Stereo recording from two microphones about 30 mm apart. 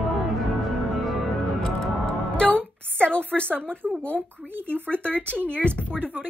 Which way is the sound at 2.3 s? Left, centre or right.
Left.